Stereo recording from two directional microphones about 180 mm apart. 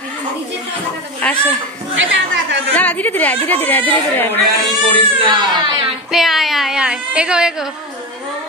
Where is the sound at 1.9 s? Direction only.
90° right.